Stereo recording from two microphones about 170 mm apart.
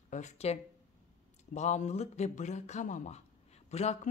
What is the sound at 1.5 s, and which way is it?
A man's voice, 40° left (ahead or behind).